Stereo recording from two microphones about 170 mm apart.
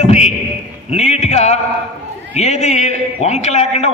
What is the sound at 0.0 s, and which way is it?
A man's voice, 40° left (ahead or behind).